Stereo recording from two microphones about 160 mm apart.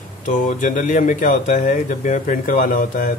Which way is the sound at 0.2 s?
55° left (ahead or behind).